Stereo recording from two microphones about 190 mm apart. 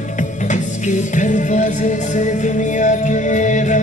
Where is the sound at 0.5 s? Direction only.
40° left (ahead or behind).